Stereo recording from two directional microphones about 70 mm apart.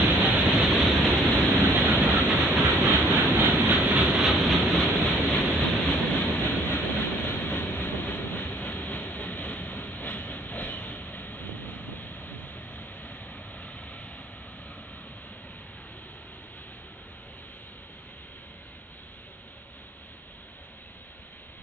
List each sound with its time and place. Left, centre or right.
0.0 s a sound: right
1.5 s rain: right
2.6 s train: right
4.2 s vehicle: centre
5.0 s vehicle: left